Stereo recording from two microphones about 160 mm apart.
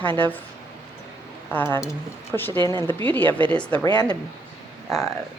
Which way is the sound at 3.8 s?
25° left (ahead or behind).